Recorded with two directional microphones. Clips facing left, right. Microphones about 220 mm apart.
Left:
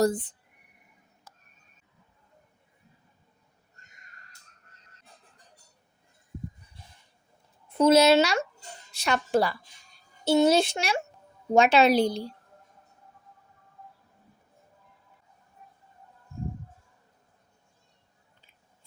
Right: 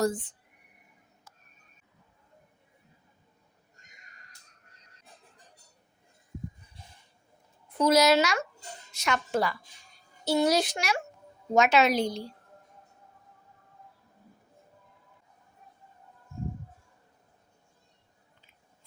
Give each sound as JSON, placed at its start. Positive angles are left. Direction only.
{"t": 0.0, "sound": "a woman's voice", "side_deg": 35}
{"t": 1.3, "sound": "a sound", "side_deg": 40}
{"t": 7.7, "sound": "a woman's voice", "side_deg": 25}